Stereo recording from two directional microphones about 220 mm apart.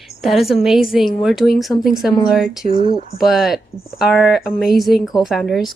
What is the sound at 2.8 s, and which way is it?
Speech, 20° right (ahead or behind).